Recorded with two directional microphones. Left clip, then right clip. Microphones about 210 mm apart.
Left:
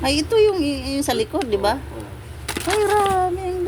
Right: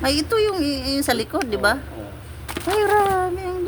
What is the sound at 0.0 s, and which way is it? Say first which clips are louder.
A woman's voice: left 3 dB; 10° right (ahead or behind).